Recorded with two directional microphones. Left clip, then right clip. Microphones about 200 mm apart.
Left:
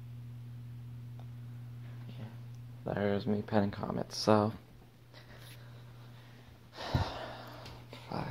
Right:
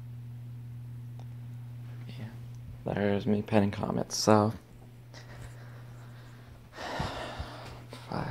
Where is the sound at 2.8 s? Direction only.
5° right (ahead or behind).